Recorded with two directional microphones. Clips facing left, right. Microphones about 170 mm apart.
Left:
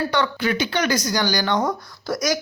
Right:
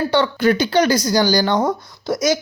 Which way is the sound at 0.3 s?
40° right (ahead or behind).